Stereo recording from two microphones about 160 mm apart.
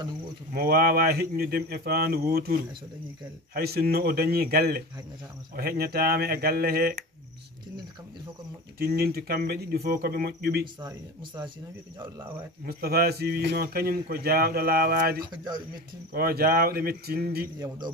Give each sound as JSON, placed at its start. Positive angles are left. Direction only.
{"t": 0.5, "sound": "speech", "side_deg": -70}
{"t": 8.7, "sound": "speech", "side_deg": -75}
{"t": 10.8, "sound": "speech", "side_deg": -25}
{"t": 12.6, "sound": "speech", "side_deg": -75}
{"t": 17.6, "sound": "speech", "side_deg": -25}